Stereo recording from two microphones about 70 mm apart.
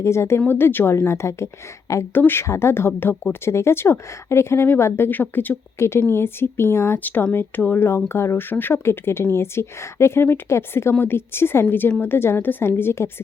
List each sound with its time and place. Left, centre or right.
0.0 s speech: left